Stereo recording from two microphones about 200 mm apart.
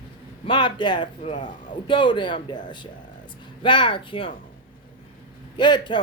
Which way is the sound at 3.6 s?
25° left (ahead or behind).